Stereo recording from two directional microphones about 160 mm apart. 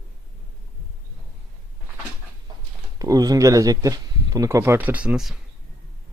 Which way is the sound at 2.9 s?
20° right (ahead or behind).